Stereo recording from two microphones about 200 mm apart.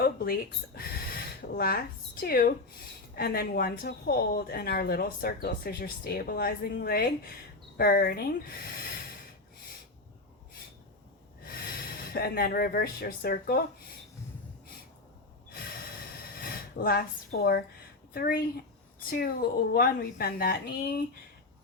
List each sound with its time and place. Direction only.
0.0 s a sound: 50° left (ahead or behind)
1.4 s speech: 50° left (ahead or behind)
11.8 s speech: 50° left (ahead or behind)
16.4 s speech: 50° left (ahead or behind)